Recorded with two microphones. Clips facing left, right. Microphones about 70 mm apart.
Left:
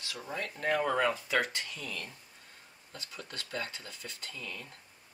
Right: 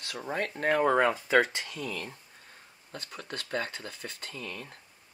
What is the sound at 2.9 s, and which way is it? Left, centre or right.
Speech, right.